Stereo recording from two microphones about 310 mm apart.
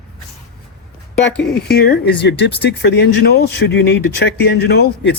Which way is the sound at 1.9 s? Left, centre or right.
Left.